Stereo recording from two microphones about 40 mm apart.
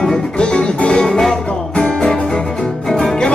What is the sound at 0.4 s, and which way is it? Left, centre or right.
Music, left.